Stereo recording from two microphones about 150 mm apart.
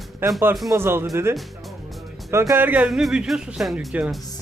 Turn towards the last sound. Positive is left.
turn(degrees=-10)  # may be behind; listen again after turning